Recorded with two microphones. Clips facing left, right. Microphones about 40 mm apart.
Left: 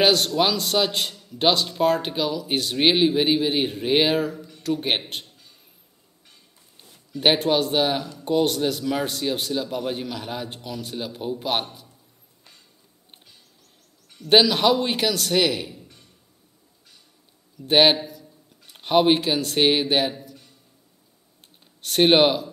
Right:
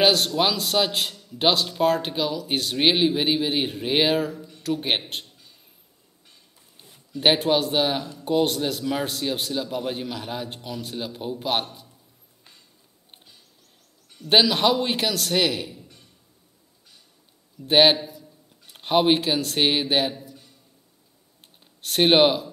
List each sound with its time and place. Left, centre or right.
0.0 s a man's voice: centre
6.8 s a man's voice: centre
14.2 s a man's voice: centre
17.6 s a man's voice: centre
21.8 s a man's voice: centre